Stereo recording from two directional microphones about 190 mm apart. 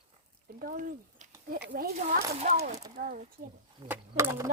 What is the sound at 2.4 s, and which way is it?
Speech, 40° right (ahead or behind).